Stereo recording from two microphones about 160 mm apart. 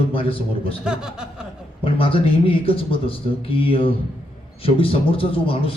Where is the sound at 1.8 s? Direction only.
35° left (ahead or behind).